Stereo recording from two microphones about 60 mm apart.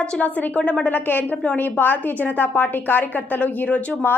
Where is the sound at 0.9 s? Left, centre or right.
Left.